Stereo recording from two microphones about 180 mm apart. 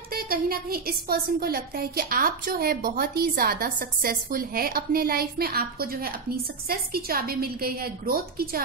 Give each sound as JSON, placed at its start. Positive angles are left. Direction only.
{"t": 0.1, "sound": "a woman's voice", "side_deg": -55}